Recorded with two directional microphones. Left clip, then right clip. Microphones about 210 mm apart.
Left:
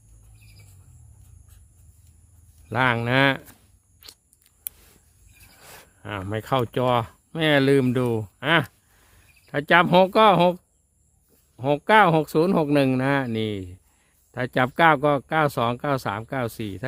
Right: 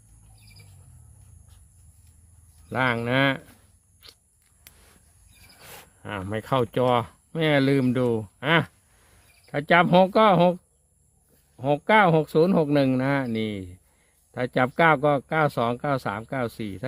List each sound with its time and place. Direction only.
2.6 s speech: 25° left (ahead or behind)
4.0 s crunch: 20° left (ahead or behind)
6.0 s speech: 10° left (ahead or behind)